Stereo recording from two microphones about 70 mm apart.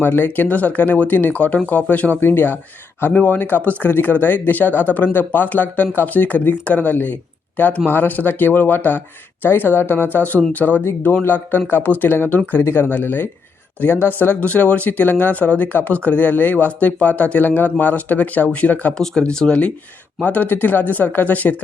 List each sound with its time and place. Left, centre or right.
0.0 s speech: left
18.9 s speech: centre